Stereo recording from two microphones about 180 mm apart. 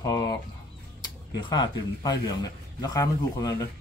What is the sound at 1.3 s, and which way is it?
A man's voice, 25° left (ahead or behind).